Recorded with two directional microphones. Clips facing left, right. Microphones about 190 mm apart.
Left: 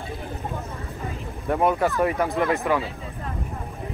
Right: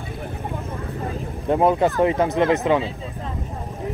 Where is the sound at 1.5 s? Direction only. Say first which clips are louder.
Right 4 dB; 25° right (ahead or behind).